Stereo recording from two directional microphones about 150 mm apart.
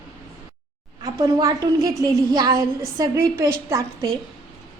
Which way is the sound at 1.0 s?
20° right (ahead or behind).